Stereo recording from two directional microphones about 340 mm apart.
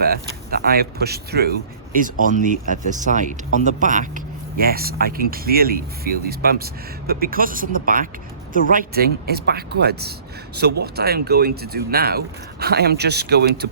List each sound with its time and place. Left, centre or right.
0.0 s speech: right